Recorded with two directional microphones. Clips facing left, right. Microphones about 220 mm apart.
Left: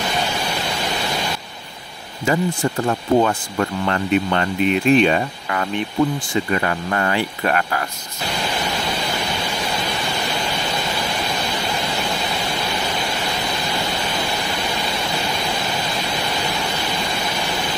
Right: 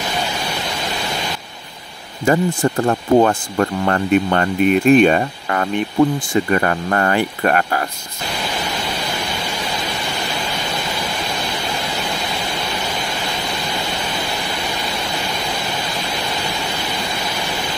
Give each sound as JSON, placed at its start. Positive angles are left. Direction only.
{"t": 2.2, "sound": "speech", "side_deg": -50}